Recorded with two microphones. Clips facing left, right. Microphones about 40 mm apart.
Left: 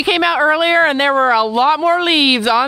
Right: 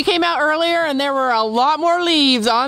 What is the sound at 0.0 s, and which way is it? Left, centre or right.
Speech, centre.